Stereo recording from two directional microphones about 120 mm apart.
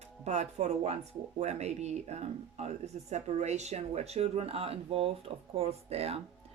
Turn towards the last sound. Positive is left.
turn(degrees=-60)  # may be behind; listen again after turning